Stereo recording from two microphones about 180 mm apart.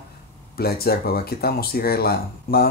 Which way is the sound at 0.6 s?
60° left (ahead or behind).